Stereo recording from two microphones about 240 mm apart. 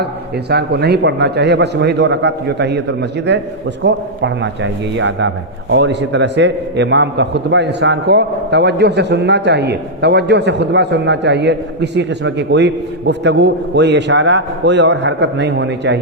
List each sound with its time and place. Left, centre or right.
0.5 s a man's voice: right